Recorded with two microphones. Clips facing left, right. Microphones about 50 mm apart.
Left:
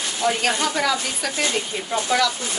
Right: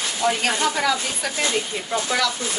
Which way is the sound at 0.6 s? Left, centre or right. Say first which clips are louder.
Right 1 dB; centre.